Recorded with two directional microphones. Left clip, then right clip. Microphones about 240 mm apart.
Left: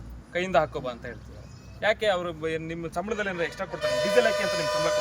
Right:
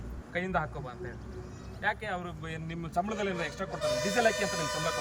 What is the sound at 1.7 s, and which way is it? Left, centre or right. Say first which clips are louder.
A man's voice: left 9 dB; left.